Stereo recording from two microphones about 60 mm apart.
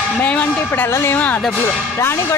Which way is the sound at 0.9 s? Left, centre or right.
Left.